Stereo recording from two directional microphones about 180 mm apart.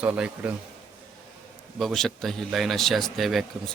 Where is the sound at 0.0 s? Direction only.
10° right (ahead or behind).